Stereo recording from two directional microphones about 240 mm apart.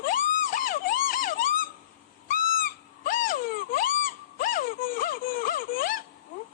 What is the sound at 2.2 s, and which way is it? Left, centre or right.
Owl, left.